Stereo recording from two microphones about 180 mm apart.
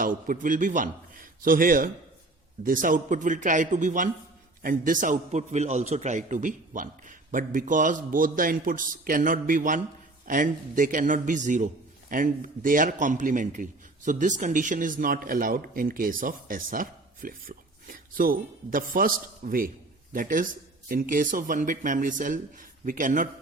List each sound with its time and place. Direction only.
0.0 s a man's voice: 50° right (ahead or behind)